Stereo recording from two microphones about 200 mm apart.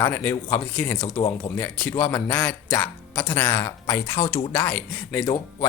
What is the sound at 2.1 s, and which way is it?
Speech, 10° left (ahead or behind).